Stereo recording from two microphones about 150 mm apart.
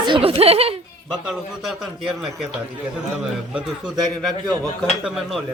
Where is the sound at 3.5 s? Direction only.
5° right (ahead or behind).